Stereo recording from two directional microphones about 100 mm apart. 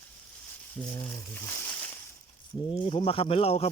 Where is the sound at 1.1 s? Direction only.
25° left (ahead or behind).